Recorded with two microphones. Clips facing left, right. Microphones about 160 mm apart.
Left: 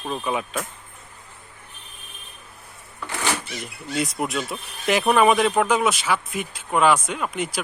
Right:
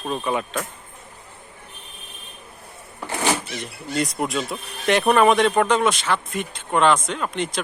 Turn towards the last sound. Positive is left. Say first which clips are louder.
# right 1 dB
turn(degrees=5)  # may be behind; listen again after turning